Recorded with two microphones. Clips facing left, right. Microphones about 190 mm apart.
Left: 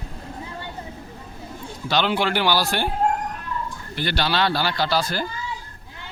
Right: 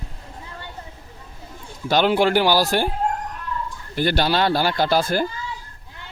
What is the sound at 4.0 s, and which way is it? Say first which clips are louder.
Speech: right 4 dB; 45° right (ahead or behind).